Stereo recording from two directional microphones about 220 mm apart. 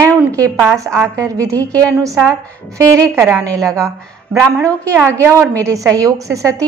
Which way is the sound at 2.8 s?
15° right (ahead or behind).